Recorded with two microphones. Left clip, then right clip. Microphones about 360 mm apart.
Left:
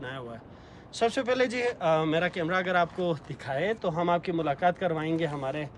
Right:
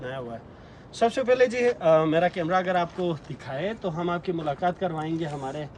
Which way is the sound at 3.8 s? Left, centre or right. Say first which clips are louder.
Left 2 dB; left.